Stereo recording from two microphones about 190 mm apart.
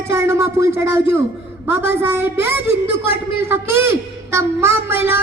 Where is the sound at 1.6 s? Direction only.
10° right (ahead or behind).